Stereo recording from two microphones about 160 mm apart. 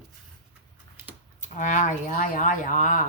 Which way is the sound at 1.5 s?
55° left (ahead or behind).